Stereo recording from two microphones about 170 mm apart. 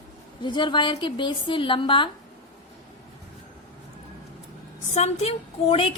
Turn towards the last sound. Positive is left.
turn(degrees=35)  # may be behind; listen again after turning